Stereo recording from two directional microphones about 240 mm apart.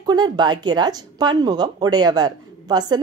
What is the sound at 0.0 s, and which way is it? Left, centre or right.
A woman's voice, centre.